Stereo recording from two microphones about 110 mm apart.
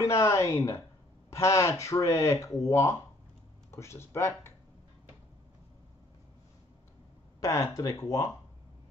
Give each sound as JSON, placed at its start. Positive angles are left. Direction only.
{"t": 0.0, "sound": "speech", "side_deg": 25}
{"t": 7.4, "sound": "speech", "side_deg": 30}